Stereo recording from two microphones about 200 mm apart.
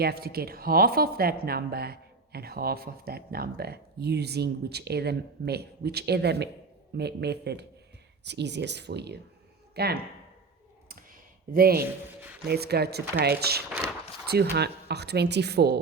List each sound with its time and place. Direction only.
0.0 s speech: 50° right (ahead or behind)
11.5 s speech: 50° right (ahead or behind)
11.8 s a man's voice: 10° right (ahead or behind)
12.5 s speech: 55° right (ahead or behind)